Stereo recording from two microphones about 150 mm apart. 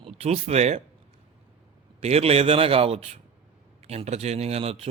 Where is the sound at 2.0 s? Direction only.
40° right (ahead or behind).